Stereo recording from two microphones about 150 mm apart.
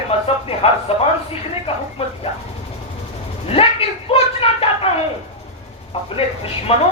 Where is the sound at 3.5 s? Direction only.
40° left (ahead or behind).